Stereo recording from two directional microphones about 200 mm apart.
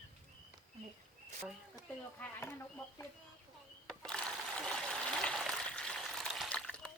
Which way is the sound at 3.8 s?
5° left (ahead or behind).